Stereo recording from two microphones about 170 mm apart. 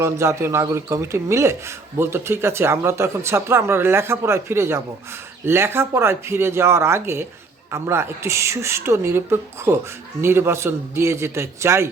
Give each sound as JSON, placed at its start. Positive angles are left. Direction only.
{"t": 0.0, "sound": "speech", "side_deg": -15}